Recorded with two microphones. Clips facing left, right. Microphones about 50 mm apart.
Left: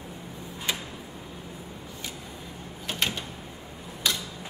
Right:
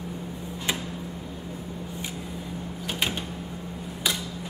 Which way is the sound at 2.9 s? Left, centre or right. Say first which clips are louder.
Right 1 dB; centre.